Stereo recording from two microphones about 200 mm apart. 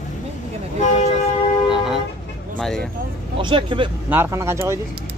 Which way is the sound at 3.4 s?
25° right (ahead or behind).